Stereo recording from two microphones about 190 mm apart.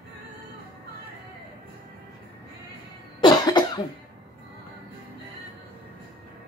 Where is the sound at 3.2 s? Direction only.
20° left (ahead or behind).